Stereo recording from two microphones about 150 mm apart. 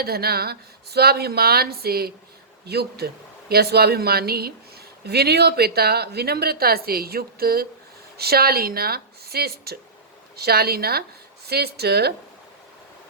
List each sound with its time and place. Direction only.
0.0 s a woman's voice: 90° right